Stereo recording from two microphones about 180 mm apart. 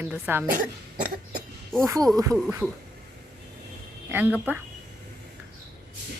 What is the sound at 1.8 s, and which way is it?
Speech, 20° right (ahead or behind).